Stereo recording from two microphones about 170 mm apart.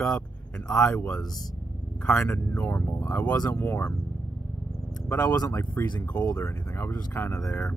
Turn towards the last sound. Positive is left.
turn(degrees=15)  # may be behind; listen again after turning